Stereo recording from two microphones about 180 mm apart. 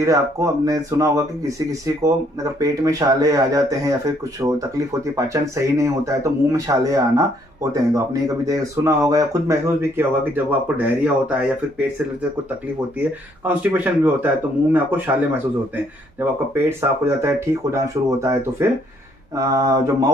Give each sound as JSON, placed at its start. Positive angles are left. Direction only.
{"t": 0.0, "sound": "speech", "side_deg": -20}
{"t": 2.6, "sound": "speech", "side_deg": -20}
{"t": 13.0, "sound": "speech", "side_deg": -10}
{"t": 19.3, "sound": "mantra", "side_deg": -20}